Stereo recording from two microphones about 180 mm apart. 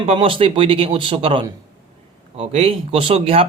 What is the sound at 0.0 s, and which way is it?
A man's voice, 30° right (ahead or behind).